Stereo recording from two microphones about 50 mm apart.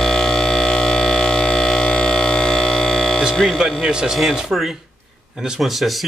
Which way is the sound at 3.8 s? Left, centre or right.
Centre.